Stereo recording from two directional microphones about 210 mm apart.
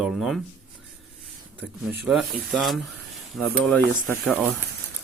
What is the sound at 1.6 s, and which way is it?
Speech, 5° right (ahead or behind).